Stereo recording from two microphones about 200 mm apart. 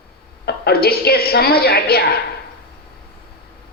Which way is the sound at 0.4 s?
50° left (ahead or behind).